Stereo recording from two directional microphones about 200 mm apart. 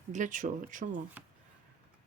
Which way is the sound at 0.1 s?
40° right (ahead or behind).